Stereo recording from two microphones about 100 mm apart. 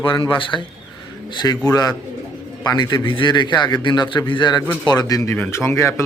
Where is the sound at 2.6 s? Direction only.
45° left (ahead or behind).